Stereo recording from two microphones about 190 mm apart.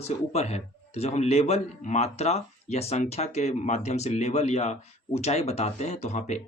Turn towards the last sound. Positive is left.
turn(degrees=35)  # may be behind; listen again after turning